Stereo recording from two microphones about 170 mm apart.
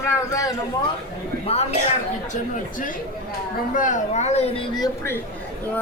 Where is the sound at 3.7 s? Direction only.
50° left (ahead or behind).